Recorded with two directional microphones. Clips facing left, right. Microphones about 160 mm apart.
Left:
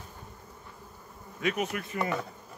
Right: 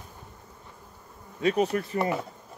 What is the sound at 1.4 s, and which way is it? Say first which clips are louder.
Speech: right 6 dB; 35° right (ahead or behind).